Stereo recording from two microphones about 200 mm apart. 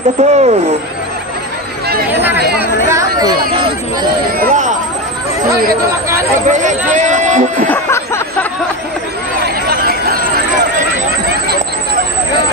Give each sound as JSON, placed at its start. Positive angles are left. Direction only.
{"t": 0.2, "sound": "speech", "side_deg": -35}
{"t": 2.2, "sound": "chatter", "side_deg": -10}
{"t": 4.4, "sound": "a sound", "side_deg": -40}
{"t": 6.4, "sound": "speech", "side_deg": -35}
{"t": 7.6, "sound": "a sound", "side_deg": 10}
{"t": 9.4, "sound": "chatter", "side_deg": -50}